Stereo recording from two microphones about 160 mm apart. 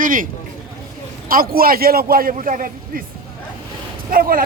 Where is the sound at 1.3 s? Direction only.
65° right (ahead or behind).